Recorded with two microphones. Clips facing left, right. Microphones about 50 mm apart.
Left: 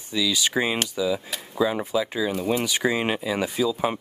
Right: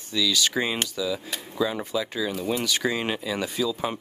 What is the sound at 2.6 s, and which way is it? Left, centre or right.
Speech, centre.